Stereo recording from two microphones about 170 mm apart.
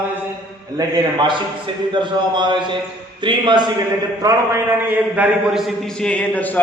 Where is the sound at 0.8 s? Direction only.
25° right (ahead or behind).